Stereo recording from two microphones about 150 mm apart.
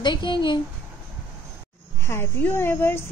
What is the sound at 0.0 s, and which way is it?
Speech, 30° left (ahead or behind).